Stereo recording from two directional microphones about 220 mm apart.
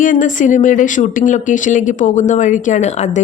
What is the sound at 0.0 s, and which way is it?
Speech, 35° left (ahead or behind).